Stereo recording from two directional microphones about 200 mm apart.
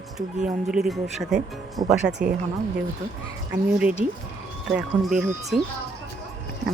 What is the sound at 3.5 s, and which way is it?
Speech, 5° right (ahead or behind).